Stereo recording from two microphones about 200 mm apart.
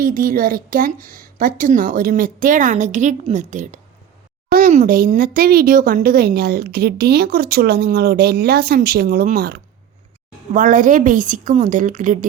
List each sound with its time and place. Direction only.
0.0 s a woman's voice: 45° right (ahead or behind)